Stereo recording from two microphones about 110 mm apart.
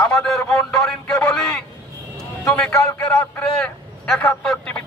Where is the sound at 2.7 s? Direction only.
30° left (ahead or behind).